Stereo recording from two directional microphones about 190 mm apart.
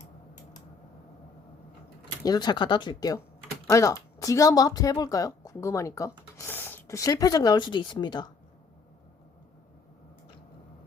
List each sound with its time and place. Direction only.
2.2 s speech: 20° left (ahead or behind)